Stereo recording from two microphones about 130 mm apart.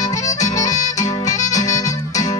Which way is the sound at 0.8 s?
30° left (ahead or behind).